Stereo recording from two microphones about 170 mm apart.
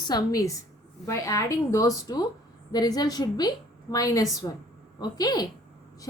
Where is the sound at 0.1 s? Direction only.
20° left (ahead or behind).